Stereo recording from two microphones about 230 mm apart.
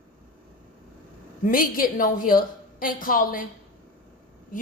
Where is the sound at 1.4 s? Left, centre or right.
Left.